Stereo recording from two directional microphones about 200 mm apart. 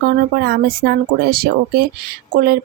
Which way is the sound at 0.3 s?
50° right (ahead or behind).